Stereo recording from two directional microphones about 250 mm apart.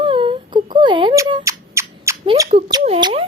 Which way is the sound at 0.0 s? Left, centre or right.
Centre.